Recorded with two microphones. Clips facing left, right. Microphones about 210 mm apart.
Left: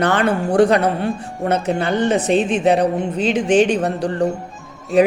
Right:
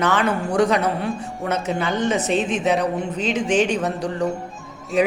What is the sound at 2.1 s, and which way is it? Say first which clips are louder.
Speech: left 4 dB; 35° left (ahead or behind).